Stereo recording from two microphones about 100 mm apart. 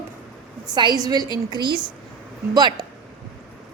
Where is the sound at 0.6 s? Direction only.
45° right (ahead or behind).